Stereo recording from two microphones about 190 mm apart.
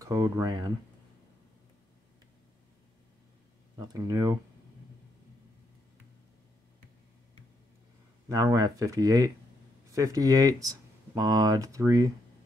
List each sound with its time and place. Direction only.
0.0 s speech: 20° right (ahead or behind)
3.7 s speech: 20° right (ahead or behind)
8.3 s speech: 20° right (ahead or behind)